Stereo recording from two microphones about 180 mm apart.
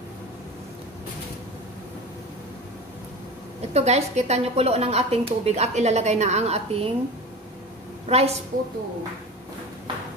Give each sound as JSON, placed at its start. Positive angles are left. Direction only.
{"t": 3.7, "sound": "speech", "side_deg": -35}
{"t": 8.1, "sound": "speech", "side_deg": -35}